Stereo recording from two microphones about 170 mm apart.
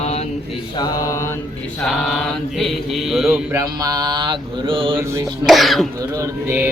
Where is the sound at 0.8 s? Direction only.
20° left (ahead or behind).